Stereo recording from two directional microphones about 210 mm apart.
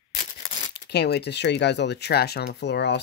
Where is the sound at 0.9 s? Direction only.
50° left (ahead or behind).